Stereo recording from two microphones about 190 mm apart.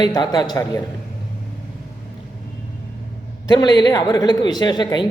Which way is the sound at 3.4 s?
20° left (ahead or behind).